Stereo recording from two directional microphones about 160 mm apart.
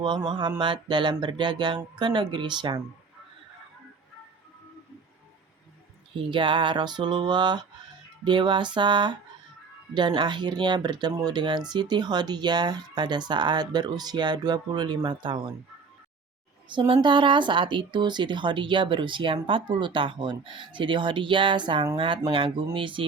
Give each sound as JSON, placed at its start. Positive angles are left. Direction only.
{"t": 0.3, "sound": "speech", "side_deg": -30}
{"t": 6.3, "sound": "speech", "side_deg": -30}
{"t": 16.6, "sound": "speech", "side_deg": -30}